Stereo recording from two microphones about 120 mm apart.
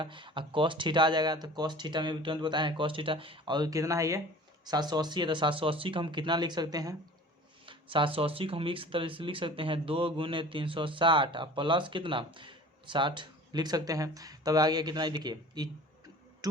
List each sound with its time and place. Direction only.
0.0 s speech: 45° right (ahead or behind)
7.7 s speech: 45° right (ahead or behind)